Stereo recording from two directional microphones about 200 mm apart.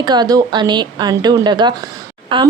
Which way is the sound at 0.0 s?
20° right (ahead or behind).